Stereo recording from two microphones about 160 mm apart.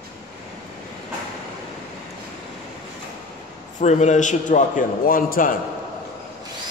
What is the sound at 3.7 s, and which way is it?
A man's voice, 45° left (ahead or behind).